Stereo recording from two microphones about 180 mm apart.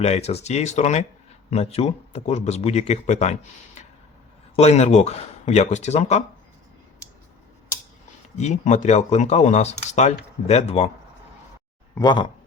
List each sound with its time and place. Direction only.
0.0 s speech: 35° left (ahead or behind)
4.5 s speech: 35° left (ahead or behind)
8.4 s speech: 40° left (ahead or behind)
11.9 s speech: 25° left (ahead or behind)